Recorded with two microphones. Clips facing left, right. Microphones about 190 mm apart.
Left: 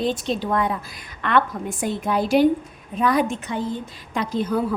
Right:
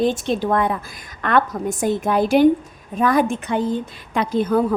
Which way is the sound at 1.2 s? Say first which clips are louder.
Right 2 dB; 45° right (ahead or behind).